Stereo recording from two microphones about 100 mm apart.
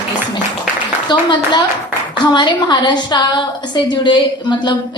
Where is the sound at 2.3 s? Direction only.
50° left (ahead or behind).